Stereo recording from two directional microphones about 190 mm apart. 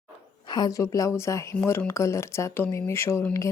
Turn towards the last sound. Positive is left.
turn(degrees=15)  # may be behind; listen again after turning